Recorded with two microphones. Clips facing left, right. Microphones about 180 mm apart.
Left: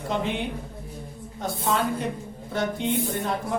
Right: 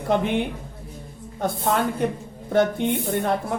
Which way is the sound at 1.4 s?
55° right (ahead or behind).